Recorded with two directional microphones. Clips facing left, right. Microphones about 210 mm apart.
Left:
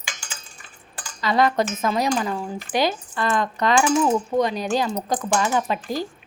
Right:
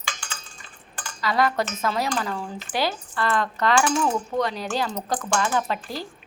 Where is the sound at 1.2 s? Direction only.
20° left (ahead or behind).